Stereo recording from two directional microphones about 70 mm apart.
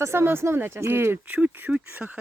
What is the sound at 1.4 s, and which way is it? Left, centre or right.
Speech, right.